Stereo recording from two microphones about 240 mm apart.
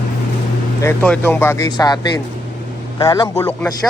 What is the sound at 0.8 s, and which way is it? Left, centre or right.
Speech, centre.